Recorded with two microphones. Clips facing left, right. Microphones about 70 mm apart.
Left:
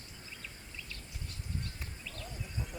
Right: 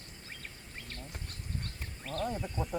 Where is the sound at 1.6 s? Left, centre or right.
Right.